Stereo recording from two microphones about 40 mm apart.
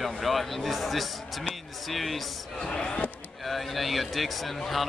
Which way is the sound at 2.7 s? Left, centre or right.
Centre.